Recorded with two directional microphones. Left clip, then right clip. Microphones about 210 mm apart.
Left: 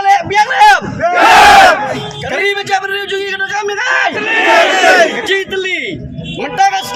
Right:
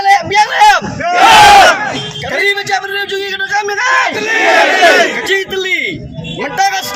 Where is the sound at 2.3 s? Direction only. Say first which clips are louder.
Right 1 dB; 5° left (ahead or behind).